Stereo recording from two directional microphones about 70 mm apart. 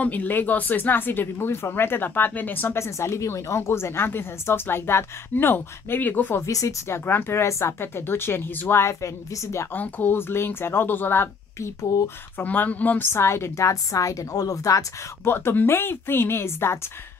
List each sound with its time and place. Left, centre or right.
0.0 s speech: left
6.4 s a woman's voice: left
6.9 s speech: left
9.8 s speech: left
13.1 s a woman's voice: left
15.2 s speech: left